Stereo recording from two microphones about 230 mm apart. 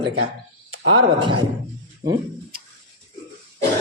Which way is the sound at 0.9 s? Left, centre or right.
Right.